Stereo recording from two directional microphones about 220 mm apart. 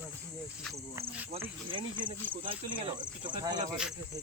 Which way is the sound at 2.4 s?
20° right (ahead or behind).